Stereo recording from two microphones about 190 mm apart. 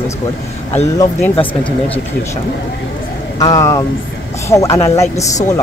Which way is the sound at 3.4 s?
20° left (ahead or behind).